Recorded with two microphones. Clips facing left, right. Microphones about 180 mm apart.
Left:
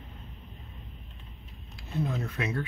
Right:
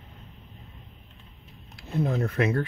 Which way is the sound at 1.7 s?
55° right (ahead or behind).